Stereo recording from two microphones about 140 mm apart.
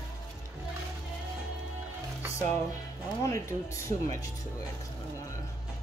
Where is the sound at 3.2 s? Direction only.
20° left (ahead or behind).